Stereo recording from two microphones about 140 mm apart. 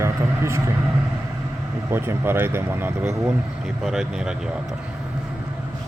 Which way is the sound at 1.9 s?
15° right (ahead or behind).